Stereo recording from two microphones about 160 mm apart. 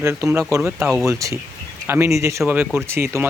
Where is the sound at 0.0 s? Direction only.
20° right (ahead or behind).